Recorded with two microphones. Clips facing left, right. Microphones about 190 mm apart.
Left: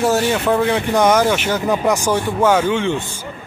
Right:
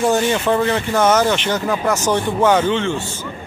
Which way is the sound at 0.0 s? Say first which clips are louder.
Even; 5° left (ahead or behind).